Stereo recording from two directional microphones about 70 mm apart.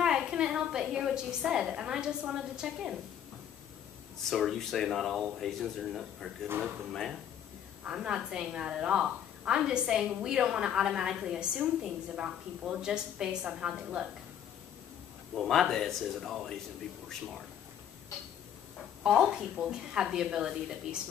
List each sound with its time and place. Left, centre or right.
0.0 s a woman's voice: centre
4.3 s speech: centre
6.4 s speech: right
6.9 s speech: centre
7.8 s a woman's voice: centre
15.3 s speech: centre
19.0 s a woman's voice: centre